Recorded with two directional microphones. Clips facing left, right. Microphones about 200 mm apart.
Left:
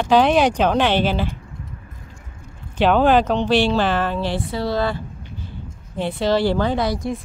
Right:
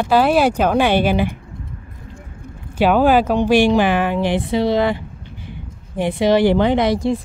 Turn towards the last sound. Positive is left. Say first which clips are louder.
# right 5 dB
turn(degrees=-25)  # may be behind; listen again after turning